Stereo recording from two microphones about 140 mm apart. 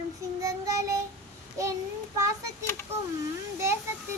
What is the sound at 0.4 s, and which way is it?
Child singing, 25° right (ahead or behind).